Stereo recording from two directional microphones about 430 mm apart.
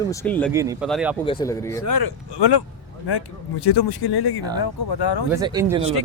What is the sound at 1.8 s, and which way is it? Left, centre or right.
Speech, left.